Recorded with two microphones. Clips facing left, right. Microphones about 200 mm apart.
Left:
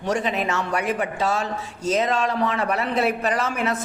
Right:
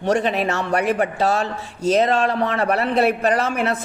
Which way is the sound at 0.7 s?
60° right (ahead or behind).